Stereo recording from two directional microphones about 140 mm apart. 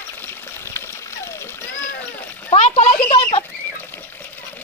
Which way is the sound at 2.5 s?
50° left (ahead or behind).